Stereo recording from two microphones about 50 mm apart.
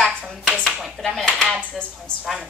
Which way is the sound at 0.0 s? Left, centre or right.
Centre.